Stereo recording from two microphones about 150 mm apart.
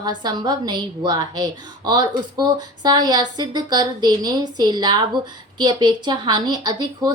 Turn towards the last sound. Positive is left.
turn(degrees=-30)  # may be behind; listen again after turning